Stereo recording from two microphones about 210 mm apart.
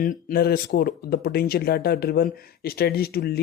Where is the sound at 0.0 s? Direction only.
40° left (ahead or behind).